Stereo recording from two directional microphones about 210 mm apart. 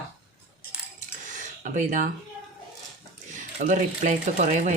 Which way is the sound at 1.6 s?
35° right (ahead or behind).